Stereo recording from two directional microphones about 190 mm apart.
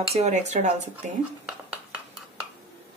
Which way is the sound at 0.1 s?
35° right (ahead or behind).